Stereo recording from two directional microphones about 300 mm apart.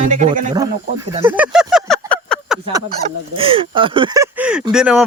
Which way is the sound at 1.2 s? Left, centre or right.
Centre.